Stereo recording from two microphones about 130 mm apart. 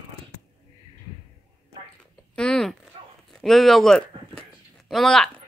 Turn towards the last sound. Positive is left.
turn(degrees=5)  # may be behind; listen again after turning